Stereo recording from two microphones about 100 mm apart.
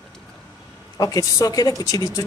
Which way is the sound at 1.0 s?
35° left (ahead or behind).